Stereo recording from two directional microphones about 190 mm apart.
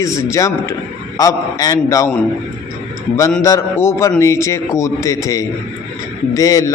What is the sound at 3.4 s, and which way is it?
A man's voice, 15° left (ahead or behind).